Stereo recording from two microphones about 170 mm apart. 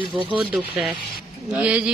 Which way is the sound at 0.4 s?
5° right (ahead or behind).